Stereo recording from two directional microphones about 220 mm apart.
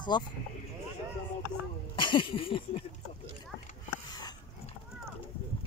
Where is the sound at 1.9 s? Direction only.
20° left (ahead or behind).